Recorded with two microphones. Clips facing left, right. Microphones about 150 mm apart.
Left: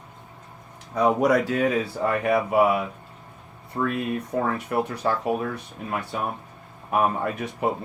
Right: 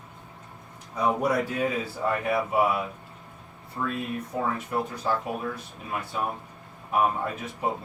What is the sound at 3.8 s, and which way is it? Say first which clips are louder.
Speech: left 5 dB; 55° left (ahead or behind).